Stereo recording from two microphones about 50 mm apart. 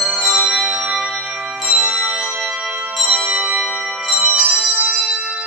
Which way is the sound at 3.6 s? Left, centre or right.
Centre.